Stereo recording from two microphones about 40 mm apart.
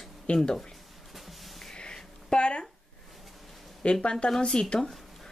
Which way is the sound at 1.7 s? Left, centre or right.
Left.